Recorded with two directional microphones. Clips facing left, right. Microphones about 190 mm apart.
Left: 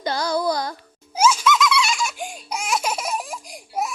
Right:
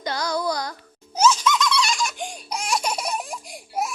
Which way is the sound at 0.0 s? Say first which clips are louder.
Left 3 dB; 30° left (ahead or behind).